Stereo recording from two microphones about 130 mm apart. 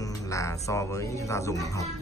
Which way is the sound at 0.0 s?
25° left (ahead or behind).